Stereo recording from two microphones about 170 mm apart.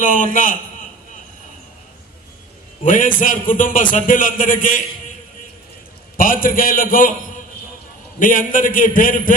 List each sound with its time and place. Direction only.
0.0 s a man's voice: 50° left (ahead or behind)
2.8 s a man's voice: 50° left (ahead or behind)
6.1 s a man's voice: 55° left (ahead or behind)
8.2 s a man's voice: 55° left (ahead or behind)